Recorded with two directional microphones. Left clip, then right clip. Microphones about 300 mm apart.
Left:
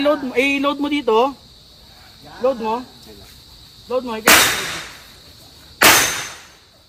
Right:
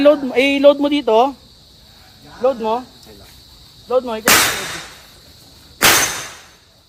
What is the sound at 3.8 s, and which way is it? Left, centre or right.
Speech, right.